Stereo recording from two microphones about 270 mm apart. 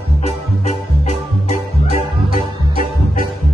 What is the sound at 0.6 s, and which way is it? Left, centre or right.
Music, left.